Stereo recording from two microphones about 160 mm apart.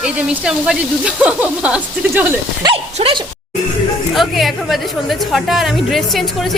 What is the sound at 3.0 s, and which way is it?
Speech, 35° right (ahead or behind).